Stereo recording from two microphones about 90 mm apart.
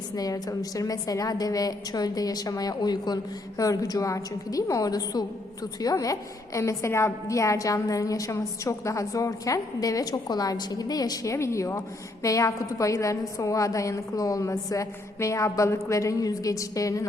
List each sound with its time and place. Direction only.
0.2 s a woman's voice: 45° left (ahead or behind)
3.6 s a woman's voice: 40° left (ahead or behind)